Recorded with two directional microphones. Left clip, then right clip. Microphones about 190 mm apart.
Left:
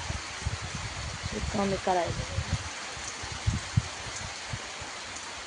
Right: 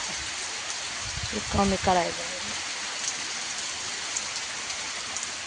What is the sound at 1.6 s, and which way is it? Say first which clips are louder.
Speech: right 5 dB; 35° right (ahead or behind).